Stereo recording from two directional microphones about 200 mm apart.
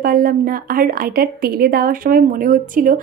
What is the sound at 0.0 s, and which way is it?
A woman's voice, 45° right (ahead or behind).